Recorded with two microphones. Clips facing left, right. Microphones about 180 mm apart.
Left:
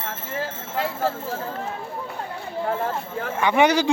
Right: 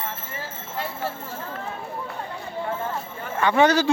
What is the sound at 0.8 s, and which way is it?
Speech, 90° left.